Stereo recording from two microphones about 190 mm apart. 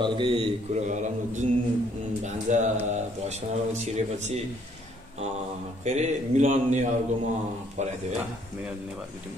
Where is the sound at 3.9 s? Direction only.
35° right (ahead or behind).